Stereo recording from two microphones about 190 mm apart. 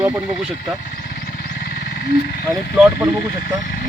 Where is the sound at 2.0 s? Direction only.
55° left (ahead or behind).